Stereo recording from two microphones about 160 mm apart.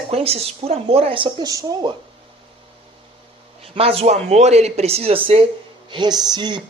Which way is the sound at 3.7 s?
35° right (ahead or behind).